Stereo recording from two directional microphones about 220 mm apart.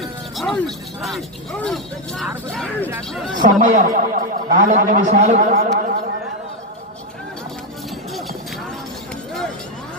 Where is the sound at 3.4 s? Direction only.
35° right (ahead or behind).